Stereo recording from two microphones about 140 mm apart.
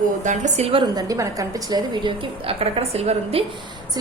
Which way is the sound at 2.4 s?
45° right (ahead or behind).